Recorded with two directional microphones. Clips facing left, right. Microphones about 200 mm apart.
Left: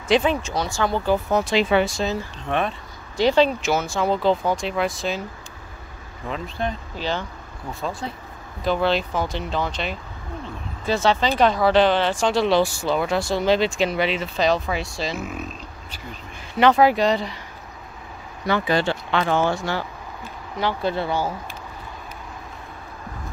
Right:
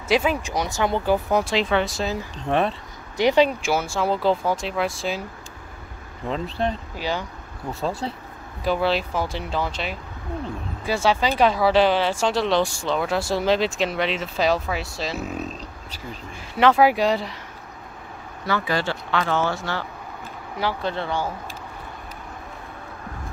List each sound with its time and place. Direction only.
0.1 s speech: 5° right (ahead or behind)
1.5 s speech: 5° left (ahead or behind)
2.4 s speech: 30° right (ahead or behind)
3.2 s speech: 15° right (ahead or behind)
6.2 s speech: 30° right (ahead or behind)
7.0 s speech: 10° right (ahead or behind)
8.0 s speech: 30° right (ahead or behind)
8.6 s speech: 5° right (ahead or behind)
15.1 s speech: 35° right (ahead or behind)
16.5 s speech: 5° right (ahead or behind)
18.4 s speech: 20° left (ahead or behind)